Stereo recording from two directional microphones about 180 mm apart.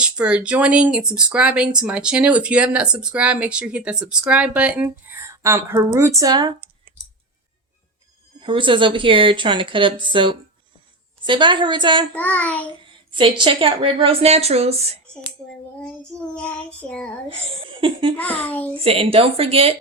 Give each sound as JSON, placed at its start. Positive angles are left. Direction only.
{"t": 0.0, "sound": "speech", "side_deg": -5}
{"t": 8.4, "sound": "speech", "side_deg": -25}
{"t": 12.1, "sound": "child singing", "side_deg": 10}
{"t": 13.1, "sound": "a woman's voice", "side_deg": -25}
{"t": 15.8, "sound": "speech", "side_deg": 5}
{"t": 17.2, "sound": "speech", "side_deg": -30}
{"t": 18.2, "sound": "child singing", "side_deg": 10}
{"t": 18.7, "sound": "a woman's voice", "side_deg": -30}